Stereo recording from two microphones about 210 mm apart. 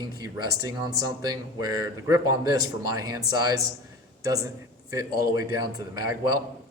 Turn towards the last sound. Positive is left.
turn(degrees=-20)  # may be behind; listen again after turning